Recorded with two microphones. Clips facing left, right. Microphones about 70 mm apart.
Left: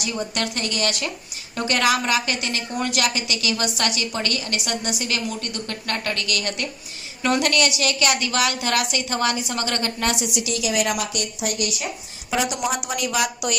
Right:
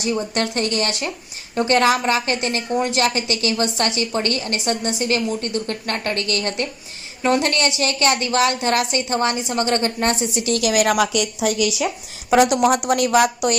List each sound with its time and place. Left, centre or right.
0.0 s a woman's voice: right
10.6 s a woman's voice: right
12.3 s a woman's voice: right